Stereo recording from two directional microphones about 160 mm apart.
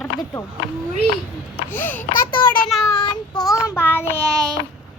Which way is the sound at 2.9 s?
25° left (ahead or behind).